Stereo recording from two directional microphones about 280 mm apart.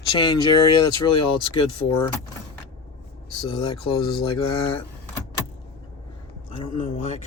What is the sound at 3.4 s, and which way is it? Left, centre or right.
Speech, centre.